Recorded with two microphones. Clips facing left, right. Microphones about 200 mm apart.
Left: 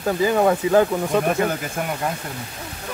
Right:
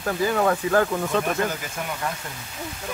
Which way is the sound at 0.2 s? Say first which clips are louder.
Left 3 dB; 20° left (ahead or behind).